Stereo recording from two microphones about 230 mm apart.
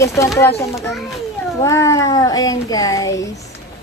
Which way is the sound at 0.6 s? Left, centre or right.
Centre.